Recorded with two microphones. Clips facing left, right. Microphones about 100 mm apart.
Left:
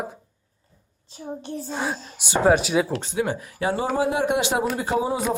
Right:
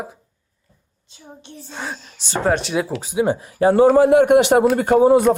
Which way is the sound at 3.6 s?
40° right (ahead or behind).